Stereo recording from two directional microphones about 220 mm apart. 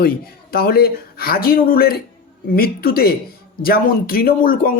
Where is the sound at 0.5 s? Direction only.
45° left (ahead or behind).